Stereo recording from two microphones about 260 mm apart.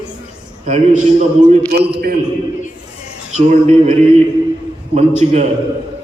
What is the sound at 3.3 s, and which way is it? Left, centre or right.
Speech, right.